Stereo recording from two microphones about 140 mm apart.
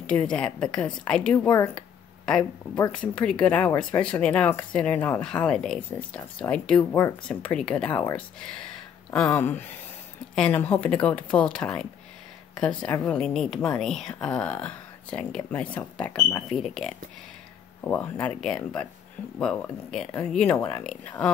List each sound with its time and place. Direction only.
0.0 s speech: 10° left (ahead or behind)
1.8 s a sound: 5° left (ahead or behind)
2.9 s speech: 10° left (ahead or behind)
6.8 s speech: 20° left (ahead or behind)
7.2 s speech: 5° left (ahead or behind)
20.5 s speech: 25° left (ahead or behind)
20.8 s speech: 5° left (ahead or behind)